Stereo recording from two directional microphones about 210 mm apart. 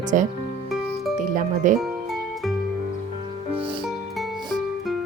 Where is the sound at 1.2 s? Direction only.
40° right (ahead or behind).